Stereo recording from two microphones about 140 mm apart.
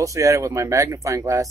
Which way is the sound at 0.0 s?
25° right (ahead or behind).